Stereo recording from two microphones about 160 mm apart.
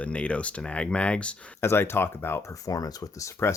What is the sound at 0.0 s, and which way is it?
Speech, 10° left (ahead or behind).